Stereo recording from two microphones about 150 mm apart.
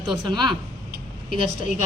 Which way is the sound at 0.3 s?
30° right (ahead or behind).